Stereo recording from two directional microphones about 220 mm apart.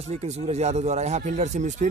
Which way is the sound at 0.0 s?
30° right (ahead or behind).